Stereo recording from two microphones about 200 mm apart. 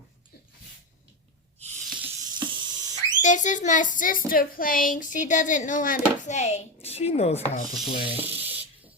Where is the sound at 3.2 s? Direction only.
40° left (ahead or behind).